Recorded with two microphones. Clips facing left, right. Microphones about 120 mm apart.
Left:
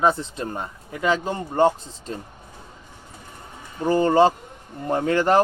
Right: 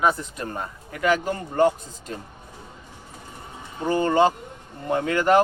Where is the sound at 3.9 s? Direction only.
35° left (ahead or behind).